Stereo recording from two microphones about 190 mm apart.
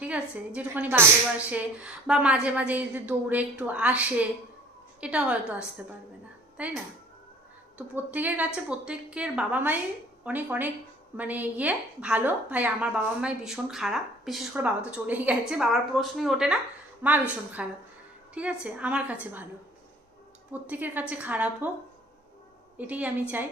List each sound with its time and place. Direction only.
0.0 s a woman's voice: 5° right (ahead or behind)
7.8 s a woman's voice: 10° right (ahead or behind)
20.5 s a woman's voice: 10° right (ahead or behind)
22.8 s a woman's voice: 10° right (ahead or behind)